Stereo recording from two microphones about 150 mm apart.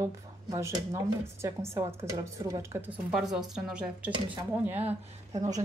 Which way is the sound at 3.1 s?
Centre (ahead or behind).